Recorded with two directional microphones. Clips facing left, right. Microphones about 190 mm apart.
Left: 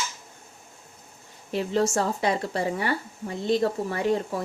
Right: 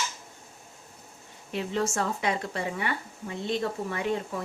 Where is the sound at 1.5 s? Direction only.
35° left (ahead or behind).